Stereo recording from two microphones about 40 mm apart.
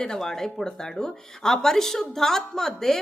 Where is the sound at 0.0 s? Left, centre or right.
Centre.